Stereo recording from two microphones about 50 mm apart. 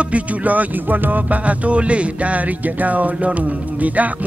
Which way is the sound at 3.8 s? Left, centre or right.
Right.